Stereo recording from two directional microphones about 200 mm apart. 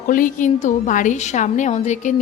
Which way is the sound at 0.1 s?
40° left (ahead or behind).